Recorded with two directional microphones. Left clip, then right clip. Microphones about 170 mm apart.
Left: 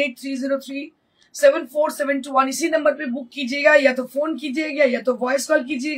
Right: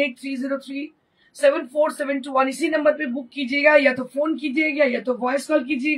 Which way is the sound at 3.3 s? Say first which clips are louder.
Left 1 dB; 30° left (ahead or behind).